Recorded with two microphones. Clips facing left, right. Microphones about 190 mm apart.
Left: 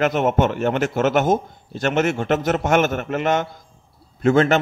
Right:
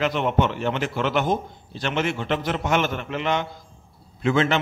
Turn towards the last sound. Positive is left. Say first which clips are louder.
# left 5 dB
turn(degrees=45)  # may be behind; listen again after turning